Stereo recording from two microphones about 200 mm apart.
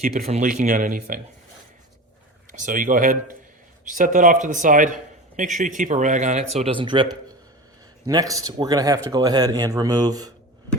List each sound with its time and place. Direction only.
0.3 s speech: 40° right (ahead or behind)
2.5 s speech: 40° right (ahead or behind); by 10.3 s 20° right (ahead or behind)